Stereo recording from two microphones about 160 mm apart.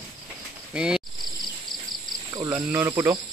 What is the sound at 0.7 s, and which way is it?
Cricket, 5° right (ahead or behind).